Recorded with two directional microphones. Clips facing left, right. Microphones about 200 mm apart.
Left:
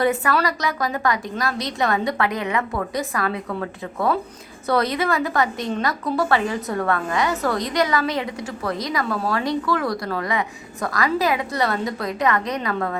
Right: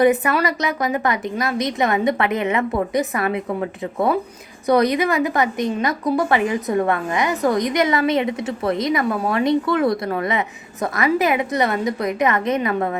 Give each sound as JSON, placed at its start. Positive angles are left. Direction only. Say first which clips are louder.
{"t": 0.0, "sound": "a woman's voice", "louder": "right 4 dB", "side_deg": -20}